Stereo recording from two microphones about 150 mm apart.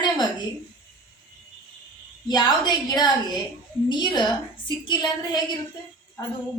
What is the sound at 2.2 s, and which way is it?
A woman's voice, 30° left (ahead or behind).